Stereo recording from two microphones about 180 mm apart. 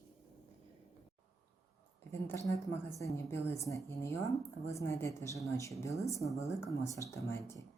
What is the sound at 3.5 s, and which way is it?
Speech, 15° left (ahead or behind).